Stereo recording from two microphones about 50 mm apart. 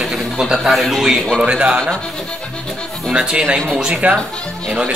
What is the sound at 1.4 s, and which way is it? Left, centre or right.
Speech, right.